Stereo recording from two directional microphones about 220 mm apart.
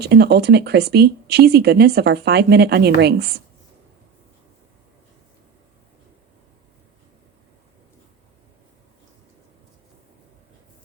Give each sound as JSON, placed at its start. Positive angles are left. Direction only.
{"t": 0.0, "sound": "speech", "side_deg": -45}